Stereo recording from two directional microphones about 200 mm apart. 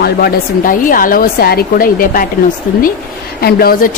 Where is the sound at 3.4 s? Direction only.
50° left (ahead or behind).